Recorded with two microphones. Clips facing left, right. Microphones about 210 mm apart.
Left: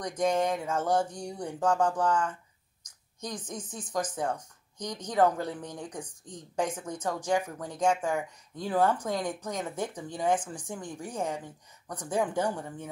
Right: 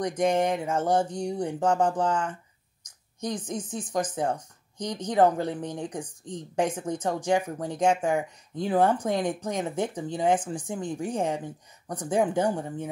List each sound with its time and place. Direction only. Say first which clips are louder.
0.0 s speech: right 3 dB; 25° right (ahead or behind)